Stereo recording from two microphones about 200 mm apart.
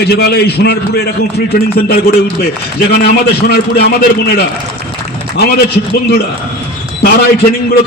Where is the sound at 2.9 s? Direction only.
50° left (ahead or behind).